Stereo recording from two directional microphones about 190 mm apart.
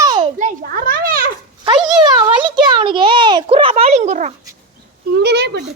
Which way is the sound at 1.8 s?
20° right (ahead or behind).